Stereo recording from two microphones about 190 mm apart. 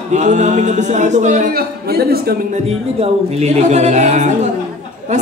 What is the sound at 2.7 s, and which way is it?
A man's voice, 30° right (ahead or behind).